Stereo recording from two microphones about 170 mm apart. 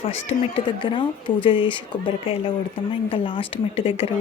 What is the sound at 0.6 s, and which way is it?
Speech, 30° left (ahead or behind).